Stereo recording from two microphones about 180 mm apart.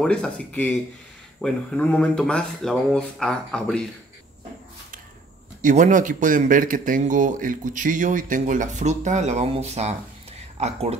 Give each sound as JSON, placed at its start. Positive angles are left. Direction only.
{"t": 0.0, "sound": "speech", "side_deg": 5}
{"t": 5.6, "sound": "speech", "side_deg": -45}